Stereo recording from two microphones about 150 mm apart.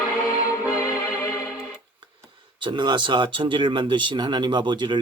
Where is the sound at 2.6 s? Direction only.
30° right (ahead or behind).